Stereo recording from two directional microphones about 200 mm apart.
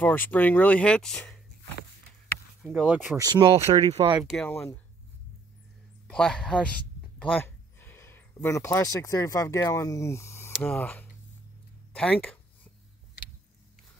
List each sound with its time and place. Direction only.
0.0 s speech: 10° left (ahead or behind)
2.6 s a man's voice: 5° right (ahead or behind)
3.2 s speech: 20° right (ahead or behind)
4.2 s a man's voice: centre (ahead or behind)
4.5 s speech: 15° left (ahead or behind)
6.0 s a man's voice: 5° left (ahead or behind)